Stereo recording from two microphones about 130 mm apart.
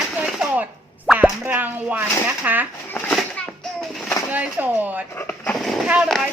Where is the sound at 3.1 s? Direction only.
5° left (ahead or behind).